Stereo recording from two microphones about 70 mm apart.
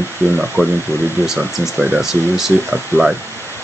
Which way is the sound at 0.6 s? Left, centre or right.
Right.